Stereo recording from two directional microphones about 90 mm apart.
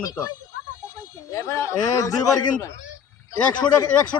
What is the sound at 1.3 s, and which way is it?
Speech, 35° left (ahead or behind).